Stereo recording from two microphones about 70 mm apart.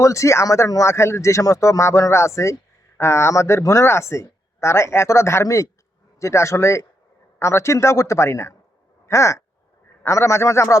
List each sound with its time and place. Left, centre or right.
0.0 s speech: left